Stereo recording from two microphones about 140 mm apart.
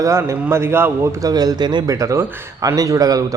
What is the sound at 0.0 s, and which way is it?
A man's voice, 20° right (ahead or behind).